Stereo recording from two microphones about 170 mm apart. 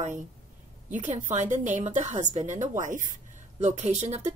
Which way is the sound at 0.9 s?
45° right (ahead or behind).